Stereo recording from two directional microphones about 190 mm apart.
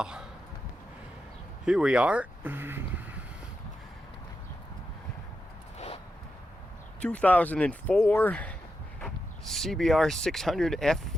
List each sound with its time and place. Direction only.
1.6 s speech: 5° right (ahead or behind)
5.7 s a sound: 35° left (ahead or behind)
7.0 s speech: 5° left (ahead or behind)